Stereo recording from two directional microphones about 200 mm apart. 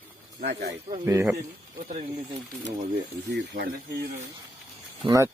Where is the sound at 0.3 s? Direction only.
55° right (ahead or behind).